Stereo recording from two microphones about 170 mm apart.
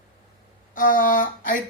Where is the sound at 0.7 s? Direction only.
55° left (ahead or behind).